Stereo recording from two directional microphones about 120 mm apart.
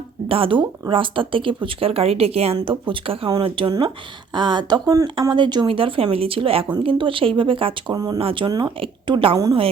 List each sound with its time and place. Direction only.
0.3 s speech: 50° right (ahead or behind)
7.9 s speech: 30° right (ahead or behind)
8.2 s speech: 50° right (ahead or behind)
8.4 s speech: 35° right (ahead or behind)
8.8 s a woman's voice: 45° right (ahead or behind)